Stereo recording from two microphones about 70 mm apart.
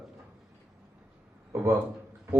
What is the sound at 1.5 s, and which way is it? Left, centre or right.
Speech, right.